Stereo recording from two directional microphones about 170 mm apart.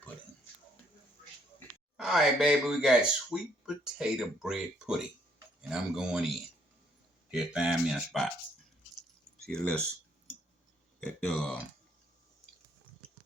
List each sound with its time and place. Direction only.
2.0 s speech: 5° right (ahead or behind)
9.4 s speech: 5° left (ahead or behind)
11.0 s speech: 5° left (ahead or behind)